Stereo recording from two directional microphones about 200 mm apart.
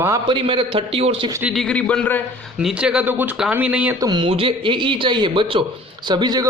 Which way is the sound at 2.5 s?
5° right (ahead or behind).